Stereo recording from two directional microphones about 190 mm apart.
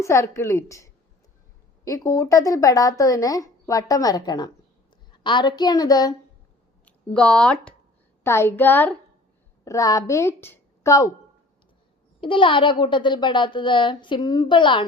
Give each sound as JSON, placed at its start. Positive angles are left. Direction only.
{"t": 0.0, "sound": "speech", "side_deg": 15}
{"t": 6.8, "sound": "a woman's voice", "side_deg": 5}
{"t": 12.2, "sound": "speech", "side_deg": 25}